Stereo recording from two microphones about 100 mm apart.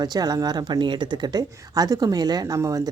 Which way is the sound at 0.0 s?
40° right (ahead or behind).